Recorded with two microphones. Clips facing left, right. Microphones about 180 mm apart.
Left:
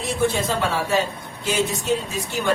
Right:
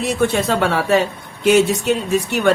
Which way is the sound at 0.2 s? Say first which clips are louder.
Right 3 dB; 65° right (ahead or behind).